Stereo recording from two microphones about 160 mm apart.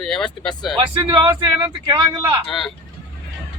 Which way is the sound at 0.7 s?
30° right (ahead or behind).